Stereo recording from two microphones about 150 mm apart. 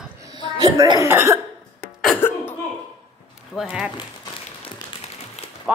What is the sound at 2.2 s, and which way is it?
Cough, 10° left (ahead or behind).